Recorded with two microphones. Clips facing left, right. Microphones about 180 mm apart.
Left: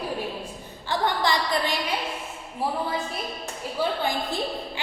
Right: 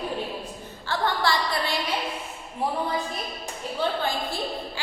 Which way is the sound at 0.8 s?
20° left (ahead or behind).